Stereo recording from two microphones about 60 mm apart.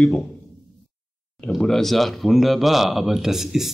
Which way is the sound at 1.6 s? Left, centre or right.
Centre.